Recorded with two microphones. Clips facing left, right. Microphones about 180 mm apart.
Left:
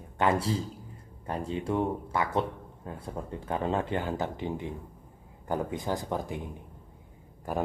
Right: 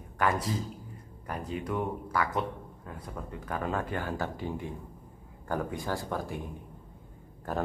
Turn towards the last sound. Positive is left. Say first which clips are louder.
# left 1 dB
turn(degrees=10)  # may be behind; listen again after turning